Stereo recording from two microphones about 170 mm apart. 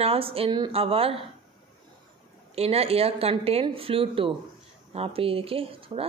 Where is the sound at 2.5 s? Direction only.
35° right (ahead or behind).